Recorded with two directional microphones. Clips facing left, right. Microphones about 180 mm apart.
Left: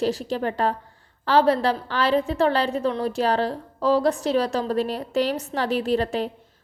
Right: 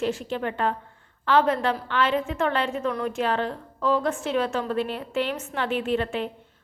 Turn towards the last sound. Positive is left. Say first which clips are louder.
# left 3 dB
turn(degrees=35)  # may be behind; listen again after turning